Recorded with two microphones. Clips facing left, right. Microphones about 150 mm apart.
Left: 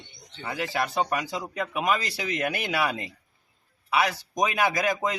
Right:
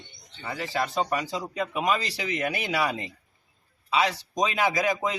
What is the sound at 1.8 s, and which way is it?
A man's voice, 15° right (ahead or behind).